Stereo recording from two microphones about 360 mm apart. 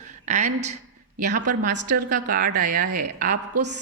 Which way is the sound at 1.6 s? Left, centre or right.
Right.